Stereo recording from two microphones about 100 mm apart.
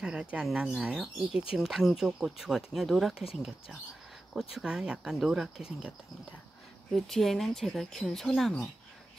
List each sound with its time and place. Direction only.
0.0 s speech: 10° right (ahead or behind)
4.3 s speech: 5° right (ahead or behind)